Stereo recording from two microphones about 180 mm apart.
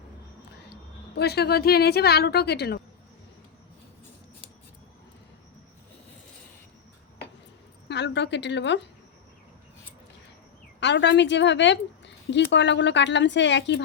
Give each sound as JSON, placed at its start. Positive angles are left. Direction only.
{"t": 0.6, "sound": "a woman's voice", "side_deg": 65}
{"t": 7.9, "sound": "a woman's voice", "side_deg": 75}
{"t": 10.8, "sound": "speech", "side_deg": 75}